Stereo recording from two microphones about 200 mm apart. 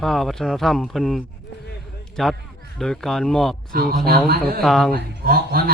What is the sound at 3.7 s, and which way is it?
Speech, 50° right (ahead or behind).